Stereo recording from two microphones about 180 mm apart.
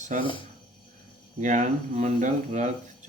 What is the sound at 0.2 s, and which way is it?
Speech, 30° left (ahead or behind).